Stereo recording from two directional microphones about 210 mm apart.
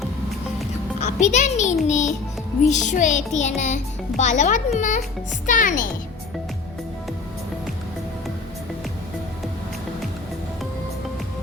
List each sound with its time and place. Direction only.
0.9 s a child's voice: 35° left (ahead or behind)